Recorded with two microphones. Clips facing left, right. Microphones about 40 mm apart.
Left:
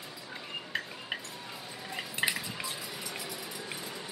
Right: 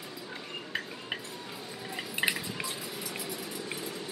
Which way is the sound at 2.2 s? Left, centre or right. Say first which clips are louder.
Right 1 dB; centre.